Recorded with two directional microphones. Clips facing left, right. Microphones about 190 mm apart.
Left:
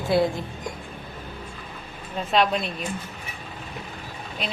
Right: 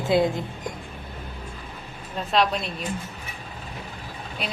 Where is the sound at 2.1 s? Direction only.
Centre (ahead or behind).